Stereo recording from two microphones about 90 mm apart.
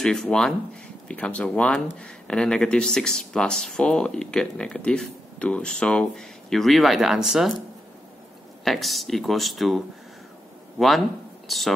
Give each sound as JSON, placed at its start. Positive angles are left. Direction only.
{"t": 0.0, "sound": "speech", "side_deg": 5}
{"t": 8.6, "sound": "speech", "side_deg": 0}
{"t": 11.4, "sound": "speech", "side_deg": 0}